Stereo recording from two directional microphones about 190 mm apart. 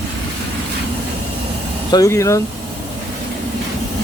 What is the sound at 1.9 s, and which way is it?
Speech, 15° left (ahead or behind).